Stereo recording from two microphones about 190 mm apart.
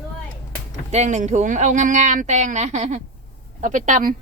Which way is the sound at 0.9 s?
35° right (ahead or behind).